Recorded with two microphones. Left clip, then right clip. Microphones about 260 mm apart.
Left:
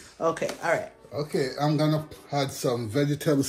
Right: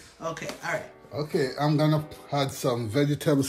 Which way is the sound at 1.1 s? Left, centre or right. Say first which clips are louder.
Right 1 dB; centre.